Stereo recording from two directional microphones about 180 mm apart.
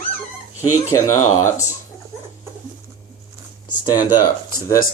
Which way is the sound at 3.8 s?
20° left (ahead or behind).